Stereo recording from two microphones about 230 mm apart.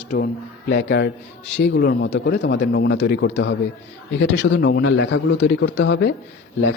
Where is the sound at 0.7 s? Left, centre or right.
Left.